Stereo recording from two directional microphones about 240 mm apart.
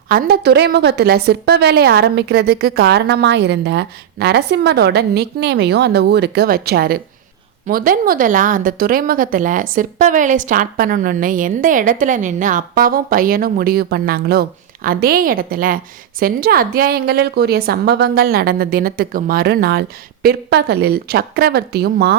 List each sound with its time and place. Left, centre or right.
0.1 s a woman's voice: right